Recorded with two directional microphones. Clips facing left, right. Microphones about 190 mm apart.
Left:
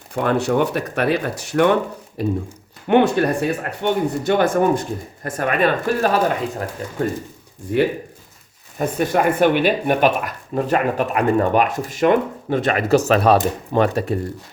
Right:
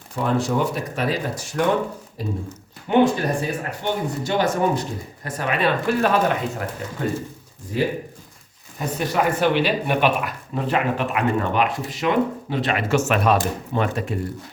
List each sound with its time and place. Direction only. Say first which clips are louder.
0.2 s speech: left 3 dB; 65° left (ahead or behind); by 6.1 s 50° left (ahead or behind)
7.7 s speech: left 5 dB; 60° left (ahead or behind); by 14.2 s 35° left (ahead or behind)